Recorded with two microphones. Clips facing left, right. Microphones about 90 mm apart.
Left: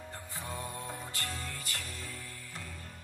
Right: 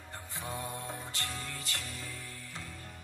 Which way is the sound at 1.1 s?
20° right (ahead or behind).